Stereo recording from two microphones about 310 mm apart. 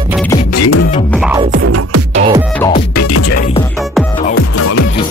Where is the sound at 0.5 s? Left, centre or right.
Left.